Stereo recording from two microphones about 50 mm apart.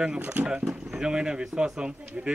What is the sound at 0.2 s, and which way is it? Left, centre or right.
Speech, right.